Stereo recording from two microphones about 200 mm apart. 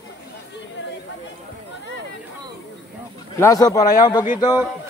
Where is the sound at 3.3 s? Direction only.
15° left (ahead or behind).